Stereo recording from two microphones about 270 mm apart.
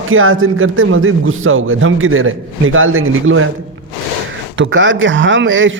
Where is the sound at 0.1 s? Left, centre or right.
Right.